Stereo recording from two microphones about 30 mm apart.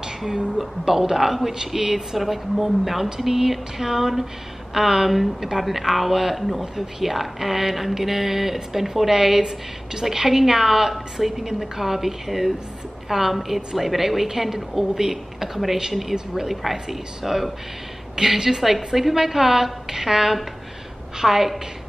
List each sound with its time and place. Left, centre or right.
0.6 s a woman's voice: centre
18.1 s a woman's voice: centre